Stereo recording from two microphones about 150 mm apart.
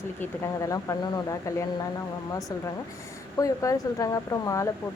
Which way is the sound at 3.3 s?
20° left (ahead or behind).